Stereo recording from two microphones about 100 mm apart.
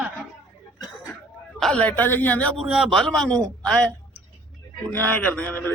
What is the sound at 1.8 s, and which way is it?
Speech, 20° left (ahead or behind).